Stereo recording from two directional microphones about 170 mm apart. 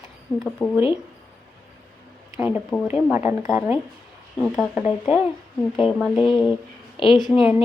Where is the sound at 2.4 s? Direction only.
10° right (ahead or behind).